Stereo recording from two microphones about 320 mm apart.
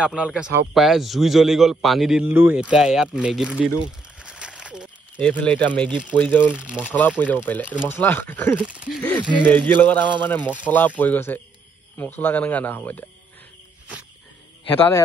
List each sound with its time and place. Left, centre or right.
0.0 s a man's voice: centre